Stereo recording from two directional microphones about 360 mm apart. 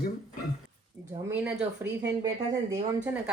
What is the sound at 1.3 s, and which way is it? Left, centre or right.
Speech, centre.